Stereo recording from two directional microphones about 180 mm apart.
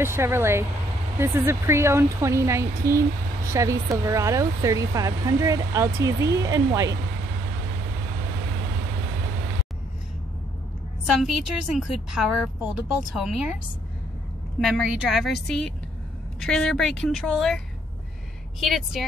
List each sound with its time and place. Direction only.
0.0 s speech: 15° right (ahead or behind)
11.1 s a woman's voice: centre (ahead or behind)
14.7 s a woman's voice: centre (ahead or behind)
18.6 s a woman's voice: centre (ahead or behind)